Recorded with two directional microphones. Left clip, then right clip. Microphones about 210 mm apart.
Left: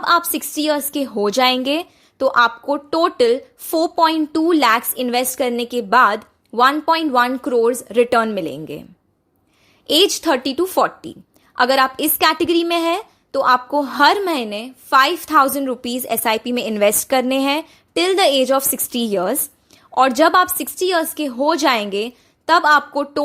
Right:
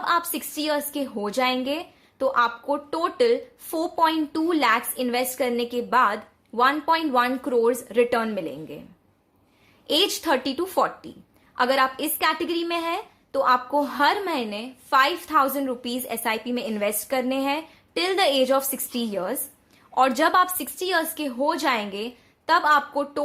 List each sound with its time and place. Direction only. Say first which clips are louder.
0.0 s a woman's voice: left 7 dB; 35° left (ahead or behind)
9.8 s a woman's voice: left 7 dB; 35° left (ahead or behind)